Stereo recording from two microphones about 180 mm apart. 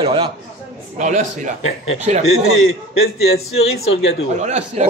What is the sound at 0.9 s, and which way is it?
A man's voice, 45° right (ahead or behind).